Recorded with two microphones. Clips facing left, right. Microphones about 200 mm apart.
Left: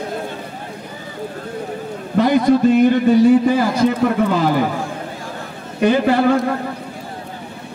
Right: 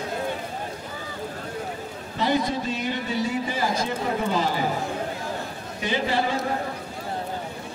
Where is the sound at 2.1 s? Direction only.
55° left (ahead or behind).